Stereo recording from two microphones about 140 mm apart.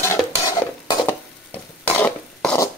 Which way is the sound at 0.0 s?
20° left (ahead or behind).